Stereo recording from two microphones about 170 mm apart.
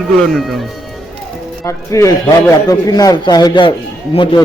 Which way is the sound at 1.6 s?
15° left (ahead or behind).